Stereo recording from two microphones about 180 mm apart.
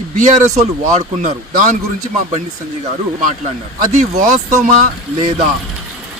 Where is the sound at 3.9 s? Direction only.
40° right (ahead or behind).